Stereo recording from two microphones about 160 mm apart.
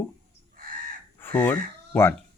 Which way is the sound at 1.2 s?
10° left (ahead or behind).